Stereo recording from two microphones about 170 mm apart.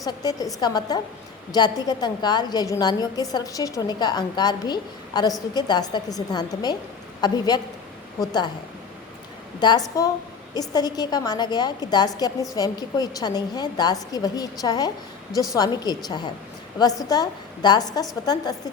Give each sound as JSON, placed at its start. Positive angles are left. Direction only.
{"t": 0.0, "sound": "a woman's voice", "side_deg": 20}
{"t": 9.6, "sound": "a woman's voice", "side_deg": 25}